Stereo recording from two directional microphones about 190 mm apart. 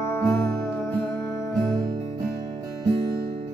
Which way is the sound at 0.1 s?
10° left (ahead or behind).